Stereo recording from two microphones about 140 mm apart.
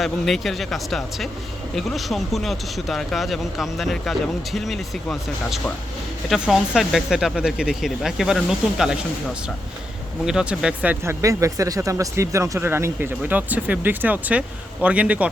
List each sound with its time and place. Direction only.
0.0 s speech: centre (ahead or behind)
10.2 s speech: 5° right (ahead or behind)
11.0 s speech: 20° right (ahead or behind)